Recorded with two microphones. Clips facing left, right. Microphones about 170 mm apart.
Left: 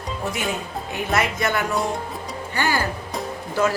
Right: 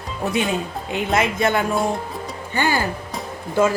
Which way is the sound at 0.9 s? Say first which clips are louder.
Right 3 dB; 20° right (ahead or behind).